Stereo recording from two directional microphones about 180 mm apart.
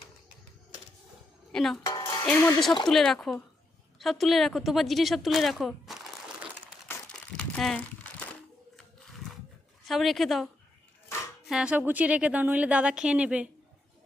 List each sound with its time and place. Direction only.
1.5 s a woman's voice: centre (ahead or behind)
1.8 s music: 20° left (ahead or behind)
2.2 s a woman's voice: 10° left (ahead or behind); by 6.7 s 5° right (ahead or behind)
6.8 s crumpling: 5° left (ahead or behind)
9.8 s a woman's voice: centre (ahead or behind)